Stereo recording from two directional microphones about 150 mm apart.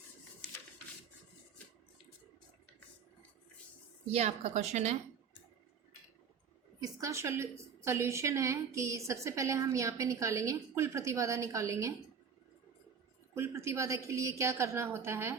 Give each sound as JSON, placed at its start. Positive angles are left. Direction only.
{"t": 4.1, "sound": "a woman's voice", "side_deg": -45}
{"t": 6.7, "sound": "a woman's voice", "side_deg": -25}
{"t": 13.3, "sound": "a woman's voice", "side_deg": -20}